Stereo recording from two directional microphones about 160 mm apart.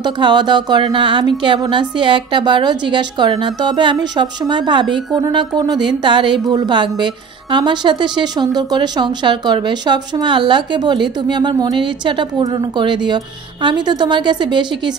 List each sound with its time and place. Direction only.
0.0 s speech: 30° right (ahead or behind)